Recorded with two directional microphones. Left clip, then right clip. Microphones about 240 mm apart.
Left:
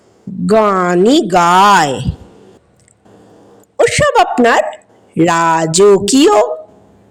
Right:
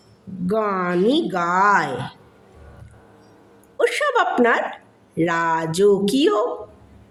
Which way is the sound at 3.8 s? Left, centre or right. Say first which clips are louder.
Left 9 dB; left.